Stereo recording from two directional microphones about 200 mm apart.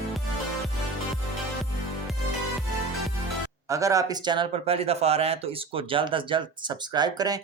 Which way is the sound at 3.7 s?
15° right (ahead or behind).